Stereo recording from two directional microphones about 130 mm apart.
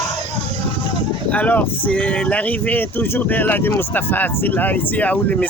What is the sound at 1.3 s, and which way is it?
Speech, 10° left (ahead or behind).